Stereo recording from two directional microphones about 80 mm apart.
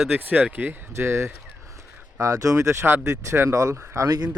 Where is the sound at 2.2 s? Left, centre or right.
Right.